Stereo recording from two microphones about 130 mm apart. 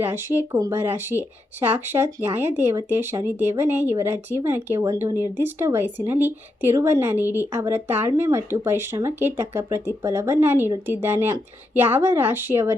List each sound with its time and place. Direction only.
0.0 s speech: 15° right (ahead or behind)